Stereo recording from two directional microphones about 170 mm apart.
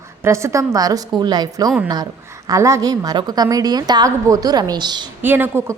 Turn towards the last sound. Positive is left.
turn(degrees=-15)  # may be behind; listen again after turning